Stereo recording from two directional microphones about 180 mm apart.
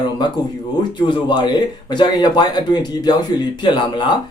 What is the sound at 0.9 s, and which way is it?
Speech, 25° left (ahead or behind).